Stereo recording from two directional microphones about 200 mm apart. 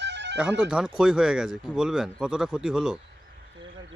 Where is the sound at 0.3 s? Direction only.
5° right (ahead or behind).